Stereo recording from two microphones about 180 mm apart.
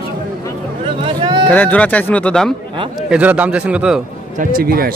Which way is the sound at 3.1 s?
10° right (ahead or behind).